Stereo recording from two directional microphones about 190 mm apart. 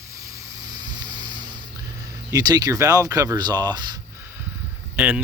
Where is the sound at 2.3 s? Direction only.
20° right (ahead or behind).